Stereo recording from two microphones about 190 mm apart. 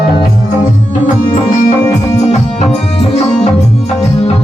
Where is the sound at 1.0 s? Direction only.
45° left (ahead or behind).